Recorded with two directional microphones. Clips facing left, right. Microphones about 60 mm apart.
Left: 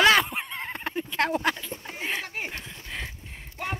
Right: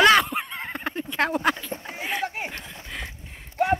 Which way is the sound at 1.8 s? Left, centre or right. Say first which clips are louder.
Right 1 dB; centre.